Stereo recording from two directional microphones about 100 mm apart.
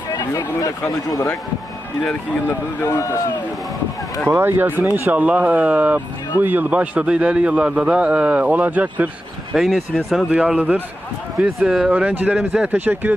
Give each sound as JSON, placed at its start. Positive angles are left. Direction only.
{"t": 0.1, "sound": "a sound", "side_deg": 40}
{"t": 0.9, "sound": "speech", "side_deg": 35}
{"t": 2.0, "sound": "speech", "side_deg": 10}
{"t": 2.8, "sound": "speech", "side_deg": 30}
{"t": 4.4, "sound": "a man's voice", "side_deg": -20}
{"t": 9.5, "sound": "speech", "side_deg": 0}
{"t": 10.2, "sound": "a man's voice", "side_deg": -10}